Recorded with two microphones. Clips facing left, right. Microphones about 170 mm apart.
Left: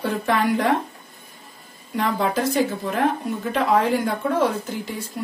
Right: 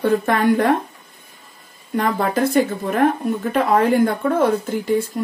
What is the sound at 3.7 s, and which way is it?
Speech, 50° right (ahead or behind).